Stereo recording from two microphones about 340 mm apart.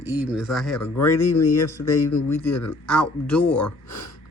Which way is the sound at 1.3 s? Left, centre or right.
Left.